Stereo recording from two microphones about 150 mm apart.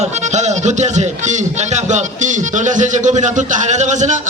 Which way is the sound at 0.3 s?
50° right (ahead or behind).